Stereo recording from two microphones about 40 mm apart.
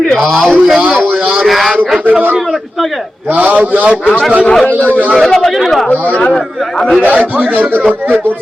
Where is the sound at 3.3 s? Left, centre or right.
Right.